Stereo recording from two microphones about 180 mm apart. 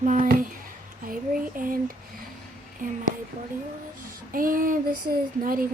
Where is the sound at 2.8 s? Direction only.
50° right (ahead or behind).